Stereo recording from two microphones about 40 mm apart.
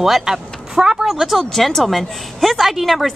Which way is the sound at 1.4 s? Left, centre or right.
Centre.